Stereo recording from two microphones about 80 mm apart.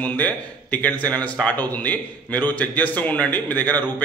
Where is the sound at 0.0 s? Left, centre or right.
Centre.